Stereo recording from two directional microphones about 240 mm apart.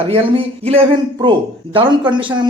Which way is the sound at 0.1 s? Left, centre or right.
Right.